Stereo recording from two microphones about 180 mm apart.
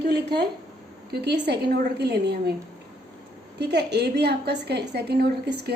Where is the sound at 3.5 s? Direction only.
70° right (ahead or behind).